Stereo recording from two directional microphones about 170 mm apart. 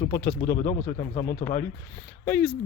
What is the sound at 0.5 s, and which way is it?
Speech, 55° left (ahead or behind).